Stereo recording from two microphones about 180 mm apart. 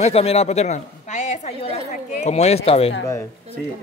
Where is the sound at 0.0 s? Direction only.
35° left (ahead or behind).